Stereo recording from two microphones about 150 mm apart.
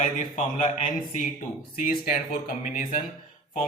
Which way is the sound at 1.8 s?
65° left (ahead or behind).